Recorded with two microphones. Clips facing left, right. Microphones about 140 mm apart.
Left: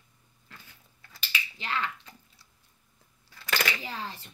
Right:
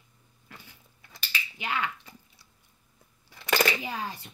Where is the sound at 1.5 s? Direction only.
10° right (ahead or behind).